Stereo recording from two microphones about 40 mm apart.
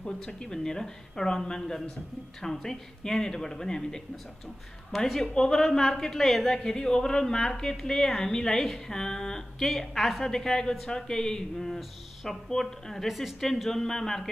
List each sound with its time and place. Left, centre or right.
0.2 s a woman's voice: centre
5.2 s speech: centre
11.5 s speech: centre
13.0 s a woman's voice: centre
13.4 s speech: centre